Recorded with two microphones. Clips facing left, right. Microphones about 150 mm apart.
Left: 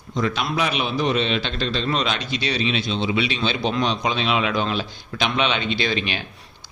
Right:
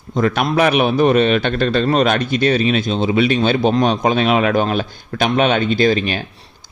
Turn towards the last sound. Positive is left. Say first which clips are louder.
# right 9 dB
turn(degrees=-45)  # may be behind; listen again after turning